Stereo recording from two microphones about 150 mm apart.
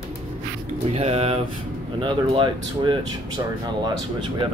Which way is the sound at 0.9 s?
40° right (ahead or behind).